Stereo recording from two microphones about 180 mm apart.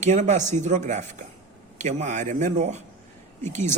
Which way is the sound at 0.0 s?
40° right (ahead or behind).